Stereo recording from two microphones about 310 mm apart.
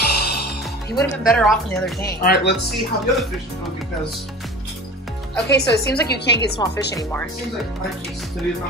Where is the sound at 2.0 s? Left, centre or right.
Left.